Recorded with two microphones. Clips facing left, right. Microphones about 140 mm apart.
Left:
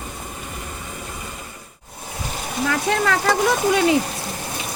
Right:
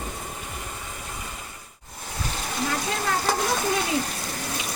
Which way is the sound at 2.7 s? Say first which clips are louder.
Left 8 dB; 80° left.